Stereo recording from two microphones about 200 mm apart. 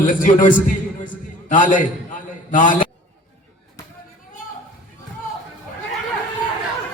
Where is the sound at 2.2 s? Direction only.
40° left (ahead or behind).